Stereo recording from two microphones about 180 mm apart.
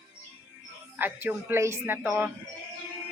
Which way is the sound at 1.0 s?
10° right (ahead or behind).